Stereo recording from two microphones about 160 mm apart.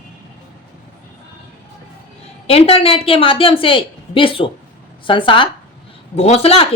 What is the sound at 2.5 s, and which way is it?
Speech, 40° left (ahead or behind).